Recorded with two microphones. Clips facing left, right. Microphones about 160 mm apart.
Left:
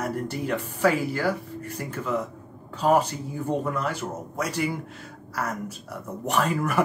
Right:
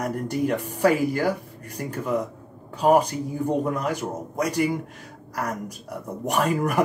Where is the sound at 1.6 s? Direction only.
40° right (ahead or behind).